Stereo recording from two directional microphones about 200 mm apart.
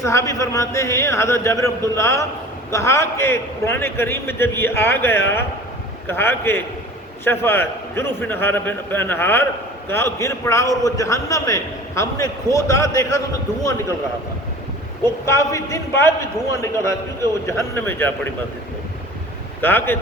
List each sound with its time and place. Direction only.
0.0 s a man's voice: 15° left (ahead or behind)
15.0 s a man's voice: 15° left (ahead or behind)
19.6 s a man's voice: 10° left (ahead or behind)